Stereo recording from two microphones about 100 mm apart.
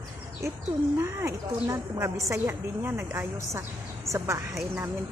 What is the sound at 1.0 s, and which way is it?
Speech, 30° right (ahead or behind).